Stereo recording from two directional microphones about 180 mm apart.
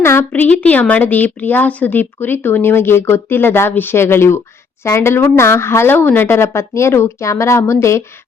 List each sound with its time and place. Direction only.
0.0 s a woman's voice: 10° left (ahead or behind)